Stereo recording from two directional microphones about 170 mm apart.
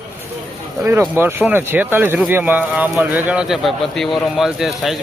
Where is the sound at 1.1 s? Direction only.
10° right (ahead or behind).